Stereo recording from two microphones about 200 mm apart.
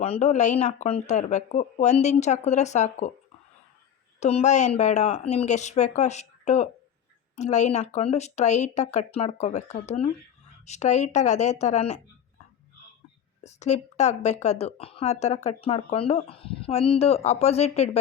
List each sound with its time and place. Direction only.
0.0 s a woman's voice: 35° left (ahead or behind)
4.2 s a woman's voice: 35° left (ahead or behind)
13.4 s a woman's voice: 35° left (ahead or behind)